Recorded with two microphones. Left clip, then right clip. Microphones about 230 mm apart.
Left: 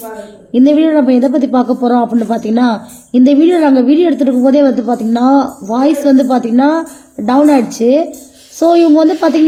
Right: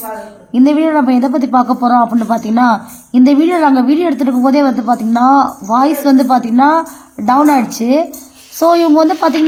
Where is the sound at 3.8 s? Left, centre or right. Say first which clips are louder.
Left 2 dB; right.